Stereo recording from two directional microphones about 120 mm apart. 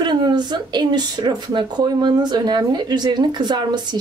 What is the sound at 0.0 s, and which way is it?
Speech, 35° right (ahead or behind).